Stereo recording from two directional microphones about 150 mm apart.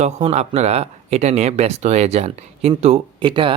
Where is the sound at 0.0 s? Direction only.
50° right (ahead or behind).